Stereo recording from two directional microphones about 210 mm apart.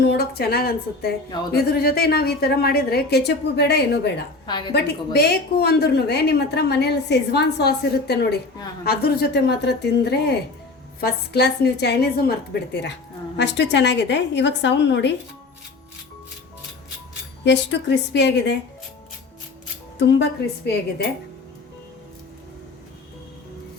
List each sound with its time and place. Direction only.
0.0 s speech: 50° left (ahead or behind)
4.4 s a woman's voice: 20° left (ahead or behind)
4.7 s a woman's voice: 50° left (ahead or behind)
17.4 s a woman's voice: 55° left (ahead or behind)
20.0 s a woman's voice: 55° left (ahead or behind)